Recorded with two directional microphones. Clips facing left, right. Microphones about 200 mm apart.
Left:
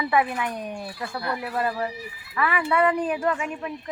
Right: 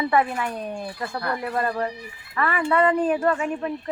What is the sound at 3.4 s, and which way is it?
Speech, 35° right (ahead or behind).